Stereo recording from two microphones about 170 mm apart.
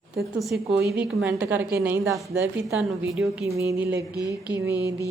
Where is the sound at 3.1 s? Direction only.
Centre (ahead or behind).